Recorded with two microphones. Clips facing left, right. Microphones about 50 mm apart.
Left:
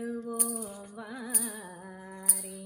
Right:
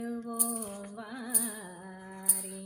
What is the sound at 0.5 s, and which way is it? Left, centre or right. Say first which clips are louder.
Music: even; right.